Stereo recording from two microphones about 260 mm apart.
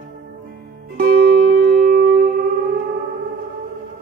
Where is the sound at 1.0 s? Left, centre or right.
Right.